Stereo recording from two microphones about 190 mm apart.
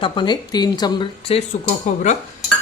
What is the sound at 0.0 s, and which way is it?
Speech, 25° left (ahead or behind).